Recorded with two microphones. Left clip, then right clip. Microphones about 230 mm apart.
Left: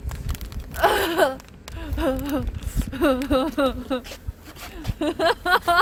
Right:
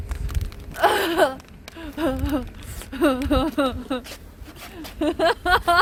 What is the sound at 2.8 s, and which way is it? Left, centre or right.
Speech, centre.